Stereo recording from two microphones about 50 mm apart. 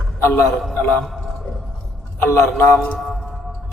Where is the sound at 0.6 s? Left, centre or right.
Centre.